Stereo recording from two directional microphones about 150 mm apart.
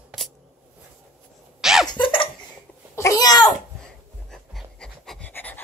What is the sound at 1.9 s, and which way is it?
Laughter, 35° left (ahead or behind).